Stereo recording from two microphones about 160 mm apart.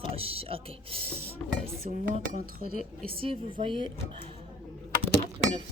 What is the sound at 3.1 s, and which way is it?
Speech, 35° right (ahead or behind).